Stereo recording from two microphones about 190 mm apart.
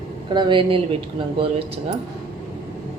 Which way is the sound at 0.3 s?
25° right (ahead or behind).